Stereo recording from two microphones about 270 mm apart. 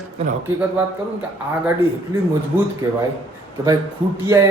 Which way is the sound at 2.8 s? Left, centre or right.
Centre.